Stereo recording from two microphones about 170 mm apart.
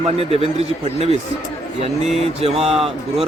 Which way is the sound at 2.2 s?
40° right (ahead or behind).